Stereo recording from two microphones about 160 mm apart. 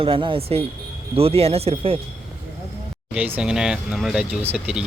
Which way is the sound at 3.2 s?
10° right (ahead or behind).